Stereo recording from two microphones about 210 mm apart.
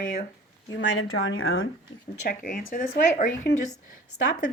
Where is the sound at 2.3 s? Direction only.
40° left (ahead or behind).